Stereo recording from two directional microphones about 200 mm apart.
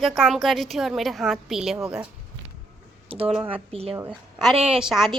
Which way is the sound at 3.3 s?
10° right (ahead or behind).